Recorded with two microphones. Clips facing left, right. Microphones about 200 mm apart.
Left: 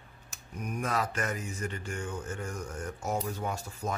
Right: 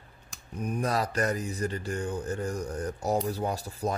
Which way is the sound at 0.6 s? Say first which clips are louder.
Right 3 dB; 35° right (ahead or behind).